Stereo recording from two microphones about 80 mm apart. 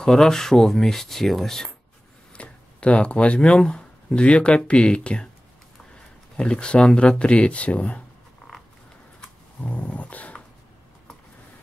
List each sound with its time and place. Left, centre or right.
0.0 s speech: centre
2.3 s speech: centre
6.3 s speech: centre
9.6 s dog: centre